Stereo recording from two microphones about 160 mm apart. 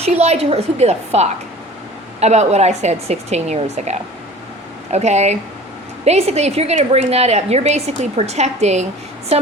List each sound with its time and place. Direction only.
0.0 s a woman's voice: 40° right (ahead or behind)